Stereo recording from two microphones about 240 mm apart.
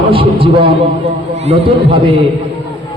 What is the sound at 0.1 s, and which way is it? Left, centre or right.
Speech, right.